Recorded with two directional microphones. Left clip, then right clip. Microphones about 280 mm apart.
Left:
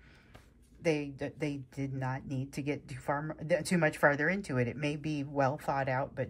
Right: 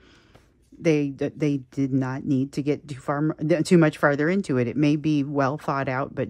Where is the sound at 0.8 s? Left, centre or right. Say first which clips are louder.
Right 10 dB; centre.